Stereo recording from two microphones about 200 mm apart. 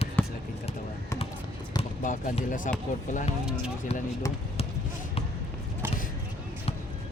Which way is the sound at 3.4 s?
5° right (ahead or behind).